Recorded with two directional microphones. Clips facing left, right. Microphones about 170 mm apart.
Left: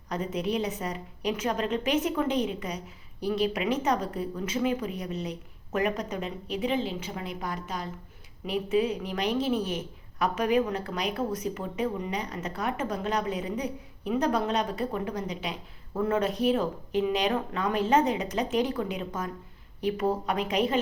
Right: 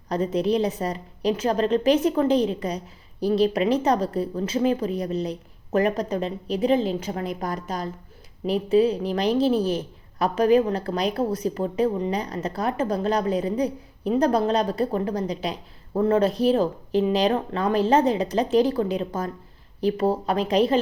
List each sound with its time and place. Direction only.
0.1 s a woman's voice: 35° right (ahead or behind)